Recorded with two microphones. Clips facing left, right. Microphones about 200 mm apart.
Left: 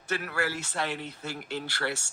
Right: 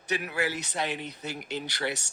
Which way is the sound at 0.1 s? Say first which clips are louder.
Right 1 dB; 15° right (ahead or behind).